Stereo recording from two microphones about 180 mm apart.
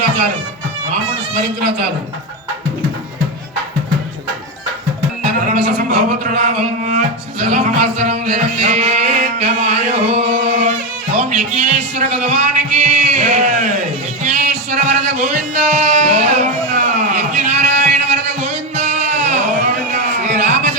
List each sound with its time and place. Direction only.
5.5 s speech: 45° right (ahead or behind)
11.2 s music: 40° right (ahead or behind)
14.3 s a sound: 45° right (ahead or behind)